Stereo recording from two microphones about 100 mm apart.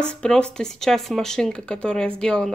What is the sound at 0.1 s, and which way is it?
Speech, 10° left (ahead or behind).